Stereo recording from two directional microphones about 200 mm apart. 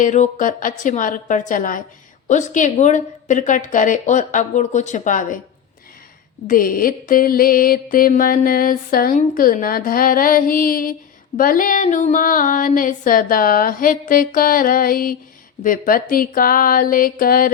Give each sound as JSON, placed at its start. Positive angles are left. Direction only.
{"t": 0.0, "sound": "a woman's voice", "side_deg": 40}
{"t": 6.5, "sound": "mantra", "side_deg": 45}